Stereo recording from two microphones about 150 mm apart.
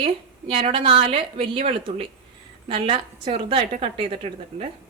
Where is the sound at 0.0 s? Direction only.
45° right (ahead or behind).